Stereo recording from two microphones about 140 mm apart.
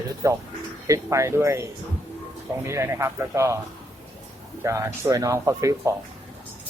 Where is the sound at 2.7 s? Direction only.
20° right (ahead or behind).